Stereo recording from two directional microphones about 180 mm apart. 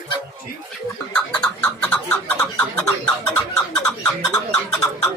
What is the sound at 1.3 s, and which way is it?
Bird, 10° left (ahead or behind).